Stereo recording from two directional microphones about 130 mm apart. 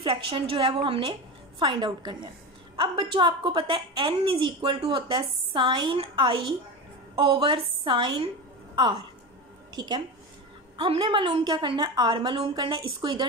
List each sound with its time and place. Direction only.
0.0 s a woman's voice: 45° right (ahead or behind)